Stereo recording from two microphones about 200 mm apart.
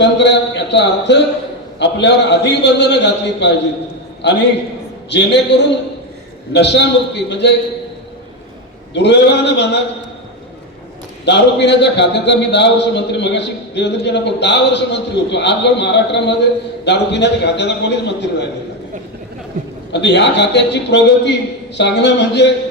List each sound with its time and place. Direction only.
0.0 s a man's voice: 60° left (ahead or behind)
6.5 s a man's voice: 60° left (ahead or behind)
9.0 s a man's voice: 60° left (ahead or behind)
11.3 s a man's voice: 60° left (ahead or behind)
19.9 s a man's voice: 60° left (ahead or behind)